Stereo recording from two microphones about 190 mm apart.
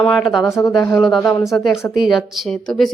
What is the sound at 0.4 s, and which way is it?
Speech, 15° left (ahead or behind).